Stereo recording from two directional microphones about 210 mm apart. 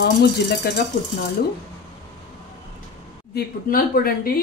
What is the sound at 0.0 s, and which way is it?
Speech, 50° left (ahead or behind).